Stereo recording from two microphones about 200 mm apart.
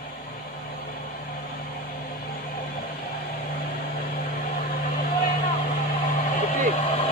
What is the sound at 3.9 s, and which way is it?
Vehicle, 50° left (ahead or behind).